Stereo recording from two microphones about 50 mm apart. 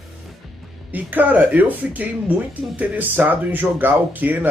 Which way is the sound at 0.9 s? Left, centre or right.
Right.